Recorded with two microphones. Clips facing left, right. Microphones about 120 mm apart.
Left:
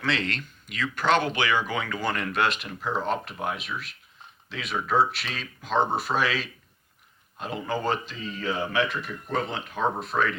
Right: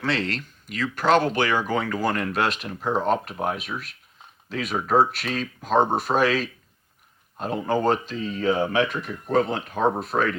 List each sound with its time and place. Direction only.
0.0 s speech: 35° right (ahead or behind)